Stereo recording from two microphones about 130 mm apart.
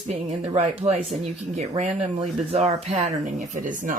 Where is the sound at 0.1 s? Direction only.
60° right (ahead or behind); by 3.9 s 80° right.